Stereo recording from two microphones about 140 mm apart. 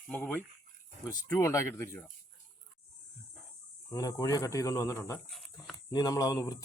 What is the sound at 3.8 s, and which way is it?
Speech, 25° left (ahead or behind).